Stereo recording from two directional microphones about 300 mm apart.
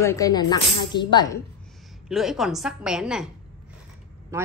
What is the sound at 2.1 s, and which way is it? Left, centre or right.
A woman's voice, centre.